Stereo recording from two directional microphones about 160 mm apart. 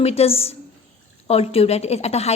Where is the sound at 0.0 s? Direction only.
40° left (ahead or behind).